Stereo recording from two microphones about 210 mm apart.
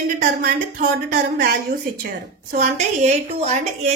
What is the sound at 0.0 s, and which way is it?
A woman's voice, 40° right (ahead or behind).